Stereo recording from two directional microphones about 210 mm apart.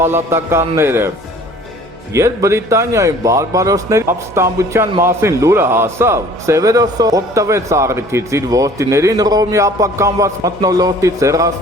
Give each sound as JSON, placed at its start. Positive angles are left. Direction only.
{"t": 0.0, "sound": "speech", "side_deg": -10}
{"t": 2.1, "sound": "speech", "side_deg": -15}